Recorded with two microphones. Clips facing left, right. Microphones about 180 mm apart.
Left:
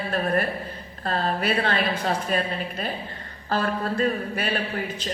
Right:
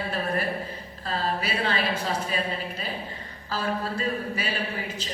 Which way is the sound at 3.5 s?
55° left (ahead or behind).